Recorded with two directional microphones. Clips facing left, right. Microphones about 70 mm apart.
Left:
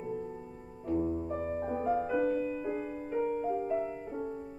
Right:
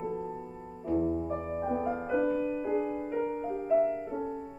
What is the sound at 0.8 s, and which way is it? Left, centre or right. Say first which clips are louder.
Music: right 2 dB; centre.